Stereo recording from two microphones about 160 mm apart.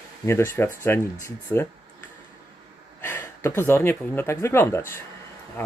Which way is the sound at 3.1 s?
15° left (ahead or behind).